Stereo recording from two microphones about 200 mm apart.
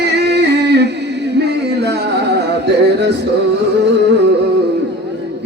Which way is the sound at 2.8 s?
55° right (ahead or behind).